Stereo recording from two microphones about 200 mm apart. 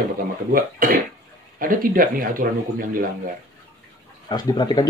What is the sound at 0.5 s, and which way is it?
Speech, 45° right (ahead or behind).